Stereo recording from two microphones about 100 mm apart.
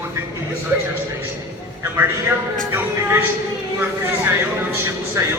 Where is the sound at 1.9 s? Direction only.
25° right (ahead or behind).